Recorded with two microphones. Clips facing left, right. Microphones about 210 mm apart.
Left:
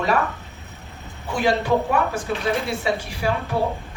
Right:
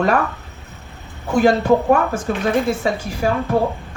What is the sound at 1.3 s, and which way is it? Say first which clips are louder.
Speech: right 6 dB; 45° right (ahead or behind).